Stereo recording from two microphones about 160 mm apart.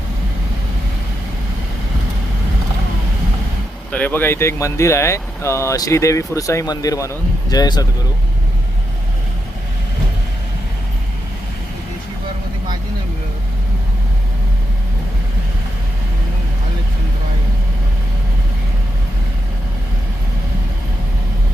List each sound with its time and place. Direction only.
3.9 s speech: 10° left (ahead or behind)